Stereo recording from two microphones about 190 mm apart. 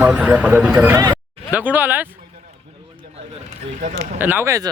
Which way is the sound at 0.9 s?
20° right (ahead or behind).